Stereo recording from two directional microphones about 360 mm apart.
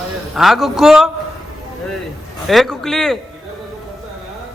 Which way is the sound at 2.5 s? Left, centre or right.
Centre.